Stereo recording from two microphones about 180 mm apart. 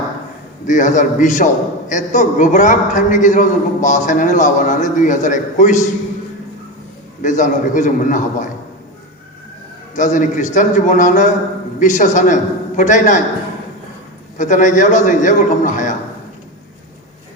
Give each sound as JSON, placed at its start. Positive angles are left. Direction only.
{"t": 0.7, "sound": "a man's voice", "side_deg": 45}
{"t": 7.2, "sound": "a man's voice", "side_deg": 45}
{"t": 9.9, "sound": "a man's voice", "side_deg": 45}
{"t": 14.3, "sound": "a man's voice", "side_deg": 45}